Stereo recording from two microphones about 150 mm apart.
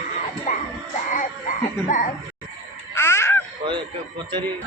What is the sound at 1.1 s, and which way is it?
Baby cry, 60° left (ahead or behind).